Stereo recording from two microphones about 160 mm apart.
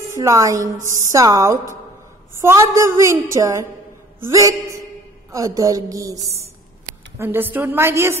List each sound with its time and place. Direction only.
0.2 s a woman's voice: 20° right (ahead or behind)